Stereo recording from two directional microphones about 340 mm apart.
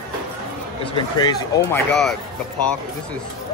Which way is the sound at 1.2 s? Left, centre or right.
Centre.